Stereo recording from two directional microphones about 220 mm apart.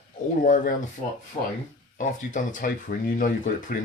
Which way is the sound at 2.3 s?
35° left (ahead or behind).